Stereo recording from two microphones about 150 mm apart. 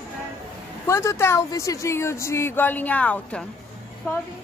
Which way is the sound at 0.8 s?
20° left (ahead or behind).